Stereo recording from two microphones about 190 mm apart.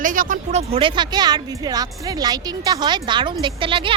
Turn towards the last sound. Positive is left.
turn(degrees=-25)  # may be behind; listen again after turning